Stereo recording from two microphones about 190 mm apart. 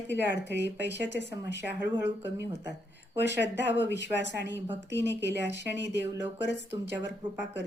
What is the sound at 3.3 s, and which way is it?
A woman's voice, 65° left (ahead or behind).